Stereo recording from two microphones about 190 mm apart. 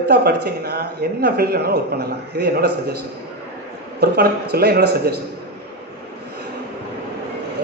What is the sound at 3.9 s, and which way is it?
A man's voice, 55° right (ahead or behind).